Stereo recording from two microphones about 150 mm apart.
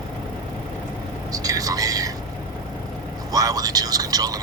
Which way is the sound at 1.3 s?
25° right (ahead or behind).